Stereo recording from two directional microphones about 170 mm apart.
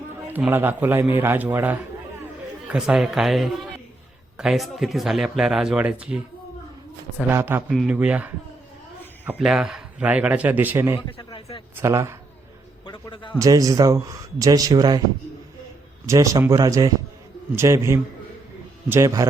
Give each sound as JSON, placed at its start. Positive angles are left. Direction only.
{"t": 0.3, "sound": "a man's voice", "side_deg": -10}
{"t": 7.2, "sound": "a man's voice", "side_deg": -10}
{"t": 9.4, "sound": "a man's voice", "side_deg": -5}
{"t": 11.3, "sound": "a sound", "side_deg": 30}
{"t": 11.8, "sound": "a man's voice", "side_deg": -15}
{"t": 12.8, "sound": "a man's voice", "side_deg": 30}
{"t": 13.4, "sound": "speech", "side_deg": -20}
{"t": 16.0, "sound": "a man's voice", "side_deg": -20}